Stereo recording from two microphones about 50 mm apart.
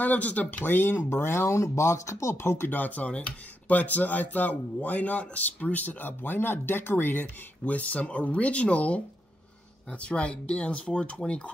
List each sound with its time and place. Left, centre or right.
0.0 s speech: left
0.7 s speech: left
2.7 s speech: left
7.6 s speech: left